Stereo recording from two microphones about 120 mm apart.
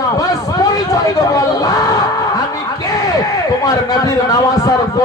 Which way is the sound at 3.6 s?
30° left (ahead or behind).